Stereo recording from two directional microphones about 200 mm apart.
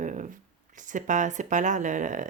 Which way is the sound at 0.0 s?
40° right (ahead or behind).